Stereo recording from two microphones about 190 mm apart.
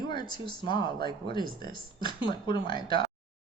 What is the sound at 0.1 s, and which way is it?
Speech, 25° left (ahead or behind).